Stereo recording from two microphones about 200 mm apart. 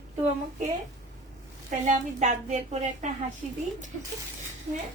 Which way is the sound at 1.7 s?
35° right (ahead or behind).